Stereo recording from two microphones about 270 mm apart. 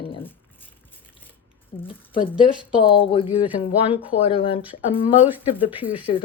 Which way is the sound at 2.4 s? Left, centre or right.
Centre.